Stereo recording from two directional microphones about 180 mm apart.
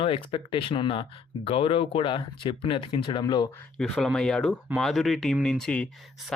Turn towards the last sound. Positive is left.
turn(degrees=5)  # may be behind; listen again after turning